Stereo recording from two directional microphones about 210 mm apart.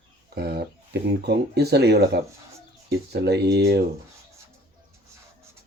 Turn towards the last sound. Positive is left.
turn(degrees=-55)  # may be behind; listen again after turning